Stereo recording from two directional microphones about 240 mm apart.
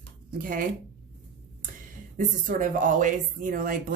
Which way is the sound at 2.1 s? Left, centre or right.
Right.